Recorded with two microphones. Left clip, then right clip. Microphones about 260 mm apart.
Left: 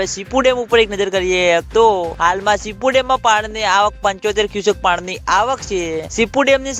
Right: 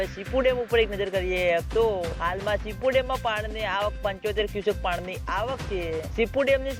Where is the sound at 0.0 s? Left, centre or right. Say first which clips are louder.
Left 9 dB; left.